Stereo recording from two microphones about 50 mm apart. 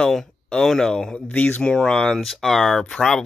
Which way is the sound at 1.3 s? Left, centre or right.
Left.